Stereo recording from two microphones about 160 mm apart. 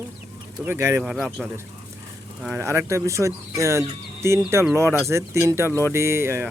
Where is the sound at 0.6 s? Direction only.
15° right (ahead or behind).